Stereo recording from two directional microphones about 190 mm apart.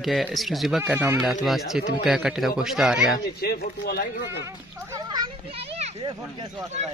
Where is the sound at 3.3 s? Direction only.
55° left (ahead or behind).